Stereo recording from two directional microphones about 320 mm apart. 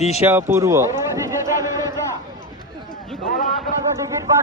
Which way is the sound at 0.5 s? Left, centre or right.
Centre.